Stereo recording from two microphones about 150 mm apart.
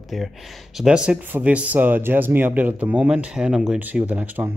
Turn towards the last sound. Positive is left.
turn(degrees=-10)  # may be behind; listen again after turning